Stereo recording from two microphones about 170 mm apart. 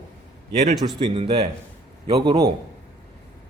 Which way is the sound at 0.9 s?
35° right (ahead or behind).